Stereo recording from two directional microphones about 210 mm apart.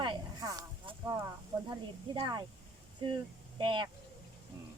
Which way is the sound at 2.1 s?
20° right (ahead or behind).